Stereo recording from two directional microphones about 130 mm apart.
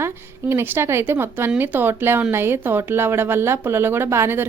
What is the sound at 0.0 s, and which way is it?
A woman's voice, 20° right (ahead or behind).